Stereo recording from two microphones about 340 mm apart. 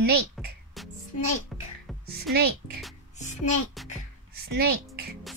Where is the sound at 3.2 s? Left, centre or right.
Left.